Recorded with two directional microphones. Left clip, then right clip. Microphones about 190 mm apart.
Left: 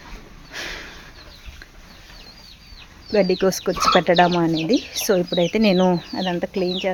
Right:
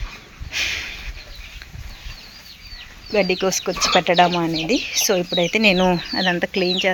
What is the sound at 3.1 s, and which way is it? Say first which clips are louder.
Speech: left 1 dB; 20° left (ahead or behind).